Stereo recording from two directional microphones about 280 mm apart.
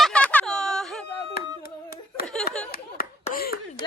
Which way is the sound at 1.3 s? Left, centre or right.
Left.